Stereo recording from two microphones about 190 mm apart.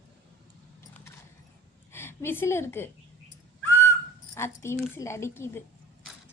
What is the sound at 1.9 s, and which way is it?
Speech, 10° left (ahead or behind).